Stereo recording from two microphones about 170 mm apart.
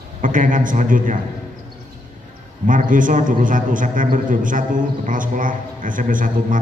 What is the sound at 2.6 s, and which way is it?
A man's voice, 50° right (ahead or behind).